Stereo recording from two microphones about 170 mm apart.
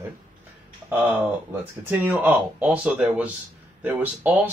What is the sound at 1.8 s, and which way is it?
Speech, 10° right (ahead or behind).